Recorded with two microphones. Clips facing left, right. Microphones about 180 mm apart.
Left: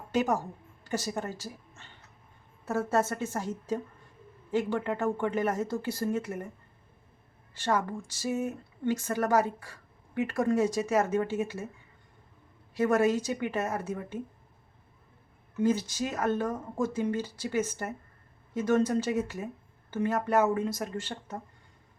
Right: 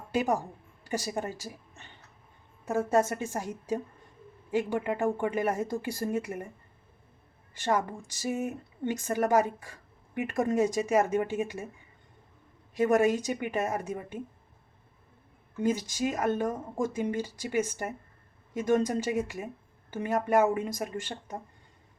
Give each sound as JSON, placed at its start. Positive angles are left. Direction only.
{"t": 0.1, "sound": "a woman's voice", "side_deg": -10}
{"t": 7.5, "sound": "speech", "side_deg": -15}
{"t": 12.7, "sound": "speech", "side_deg": -15}
{"t": 15.5, "sound": "speech", "side_deg": -15}